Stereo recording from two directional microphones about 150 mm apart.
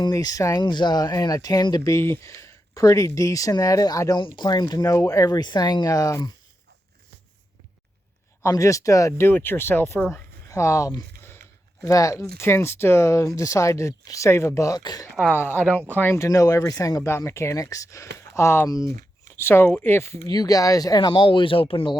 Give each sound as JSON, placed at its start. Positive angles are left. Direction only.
{"t": 0.0, "sound": "speech", "side_deg": 25}
{"t": 8.4, "sound": "speech", "side_deg": 20}
{"t": 10.5, "sound": "a sound", "side_deg": 20}
{"t": 12.4, "sound": "speech", "side_deg": 15}
{"t": 15.3, "sound": "speech", "side_deg": 15}
{"t": 18.9, "sound": "a sound", "side_deg": -60}
{"t": 19.4, "sound": "speech", "side_deg": 15}